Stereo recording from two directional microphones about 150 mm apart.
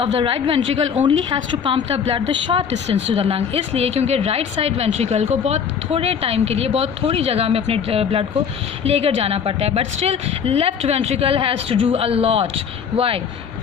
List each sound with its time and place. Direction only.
0.0 s a woman's voice: 40° right (ahead or behind)